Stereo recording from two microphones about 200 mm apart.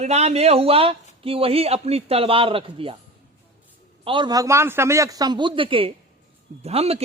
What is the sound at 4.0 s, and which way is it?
A man's voice, 25° right (ahead or behind).